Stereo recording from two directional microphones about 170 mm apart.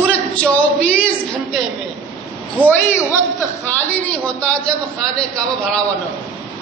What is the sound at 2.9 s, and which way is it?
A man's voice, 15° left (ahead or behind).